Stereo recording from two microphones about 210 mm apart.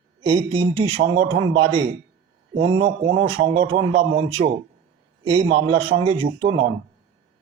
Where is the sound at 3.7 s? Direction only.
30° right (ahead or behind).